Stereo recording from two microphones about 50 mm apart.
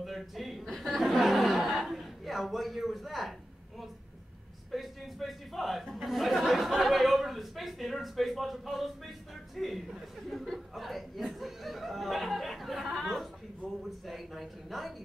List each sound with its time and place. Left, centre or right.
0.0 s speech: centre
4.6 s speech: centre